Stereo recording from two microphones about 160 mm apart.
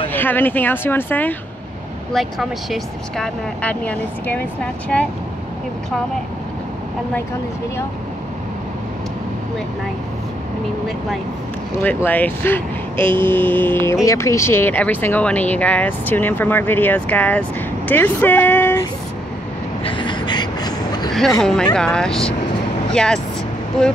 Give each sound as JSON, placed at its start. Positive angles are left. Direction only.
{"t": 0.1, "sound": "speech", "side_deg": 10}
{"t": 2.1, "sound": "speech", "side_deg": 0}
{"t": 11.8, "sound": "speech", "side_deg": 10}
{"t": 19.8, "sound": "a sound", "side_deg": 30}
{"t": 21.4, "sound": "speech", "side_deg": 5}